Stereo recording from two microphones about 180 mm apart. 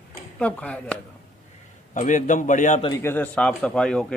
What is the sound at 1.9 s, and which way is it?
Speech, 45° left (ahead or behind).